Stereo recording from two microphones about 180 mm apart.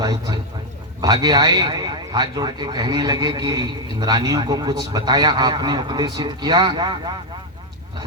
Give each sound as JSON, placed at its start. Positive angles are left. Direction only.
{"t": 0.0, "sound": "a man's voice", "side_deg": -20}